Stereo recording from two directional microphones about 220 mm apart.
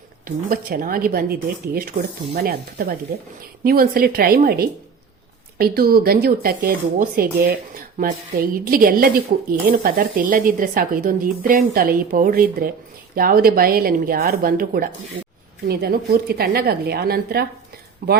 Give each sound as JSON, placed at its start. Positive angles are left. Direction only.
{"t": 0.3, "sound": "speech", "side_deg": -40}